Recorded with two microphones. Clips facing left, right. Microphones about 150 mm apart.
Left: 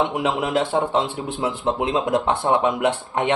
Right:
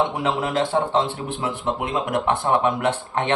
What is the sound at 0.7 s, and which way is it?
Speech, 10° left (ahead or behind).